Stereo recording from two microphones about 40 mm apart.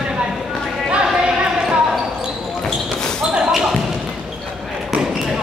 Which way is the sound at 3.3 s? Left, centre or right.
Centre.